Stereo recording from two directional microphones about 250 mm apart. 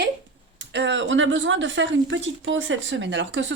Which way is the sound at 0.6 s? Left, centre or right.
Right.